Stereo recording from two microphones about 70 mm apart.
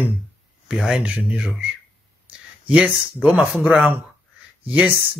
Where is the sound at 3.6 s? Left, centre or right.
Centre.